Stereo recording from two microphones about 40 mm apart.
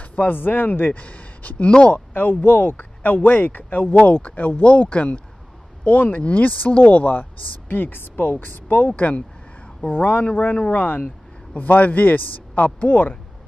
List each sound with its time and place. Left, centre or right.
0.0 s speech: left
0.9 s speech: left
1.9 s speech: left
11.5 s speech: left